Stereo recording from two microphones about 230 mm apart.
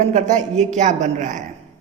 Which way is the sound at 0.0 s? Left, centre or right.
Right.